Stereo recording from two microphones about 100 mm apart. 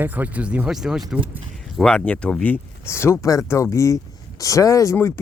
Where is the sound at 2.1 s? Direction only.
10° left (ahead or behind); by 5.1 s 30° left (ahead or behind).